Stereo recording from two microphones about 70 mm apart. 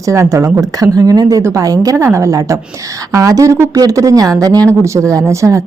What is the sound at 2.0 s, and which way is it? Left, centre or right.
A woman's voice, right.